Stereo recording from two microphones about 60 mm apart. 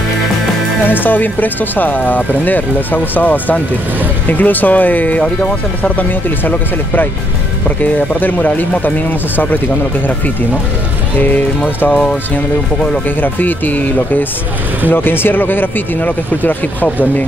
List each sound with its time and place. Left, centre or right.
0.8 s speech: left
7.6 s speech: left
11.1 s speech: left
11.9 s speech: centre
13.2 s speech: left